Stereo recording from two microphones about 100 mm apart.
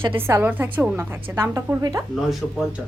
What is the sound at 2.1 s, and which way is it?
Speech, centre (ahead or behind).